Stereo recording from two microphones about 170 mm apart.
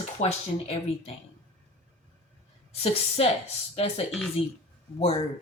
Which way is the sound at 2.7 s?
35° left (ahead or behind).